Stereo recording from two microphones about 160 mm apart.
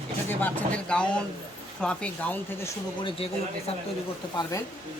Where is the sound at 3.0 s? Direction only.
35° left (ahead or behind).